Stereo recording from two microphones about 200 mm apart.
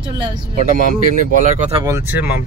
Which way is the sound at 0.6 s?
40° right (ahead or behind).